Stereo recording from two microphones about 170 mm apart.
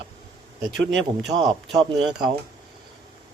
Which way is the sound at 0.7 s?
90° right.